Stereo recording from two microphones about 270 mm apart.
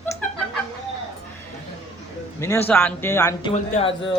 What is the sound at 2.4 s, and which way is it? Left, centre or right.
Speech, centre.